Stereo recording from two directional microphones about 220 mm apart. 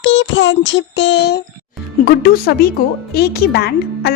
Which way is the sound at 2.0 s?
45° left (ahead or behind).